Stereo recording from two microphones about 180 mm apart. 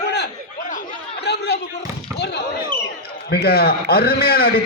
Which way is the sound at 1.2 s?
65° left (ahead or behind).